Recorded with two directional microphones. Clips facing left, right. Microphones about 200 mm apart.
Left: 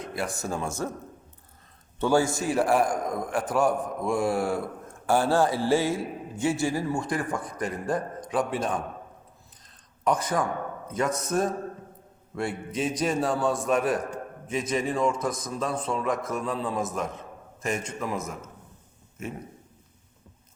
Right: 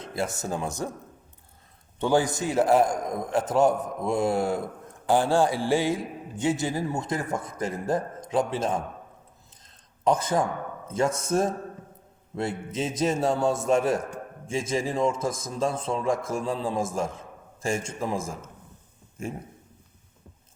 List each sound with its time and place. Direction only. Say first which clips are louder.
0.2 s a man's voice: right 2 dB; 20° right (ahead or behind)
2.0 s a man's voice: even; 15° right (ahead or behind)
10.0 s a man's voice: right 2 dB; 25° right (ahead or behind)